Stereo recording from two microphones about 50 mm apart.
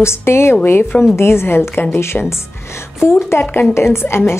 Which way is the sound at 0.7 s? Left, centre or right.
Left.